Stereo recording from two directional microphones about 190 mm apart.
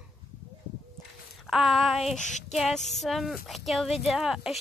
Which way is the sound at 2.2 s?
40° left (ahead or behind).